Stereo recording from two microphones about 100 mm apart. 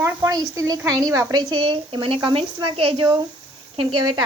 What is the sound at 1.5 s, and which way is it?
Speech, 55° right (ahead or behind).